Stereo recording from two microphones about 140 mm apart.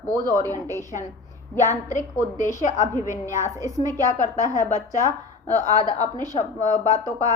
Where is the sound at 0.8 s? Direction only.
60° left (ahead or behind).